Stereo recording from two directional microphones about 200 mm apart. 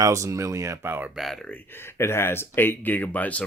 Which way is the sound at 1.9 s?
10° left (ahead or behind).